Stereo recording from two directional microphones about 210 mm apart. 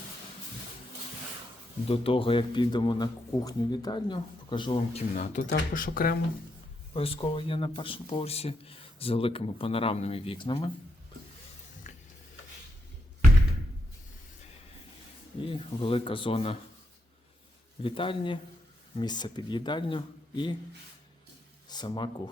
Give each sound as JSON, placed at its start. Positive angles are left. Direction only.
{"t": 1.9, "sound": "speech", "side_deg": 25}
{"t": 6.9, "sound": "speech", "side_deg": 25}
{"t": 11.9, "sound": "stir", "side_deg": 35}
{"t": 15.4, "sound": "speech", "side_deg": 25}
{"t": 17.8, "sound": "speech", "side_deg": 25}
{"t": 21.7, "sound": "speech", "side_deg": 20}